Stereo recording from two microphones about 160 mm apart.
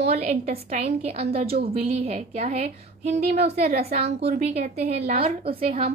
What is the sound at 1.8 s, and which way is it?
A woman's voice, 40° right (ahead or behind).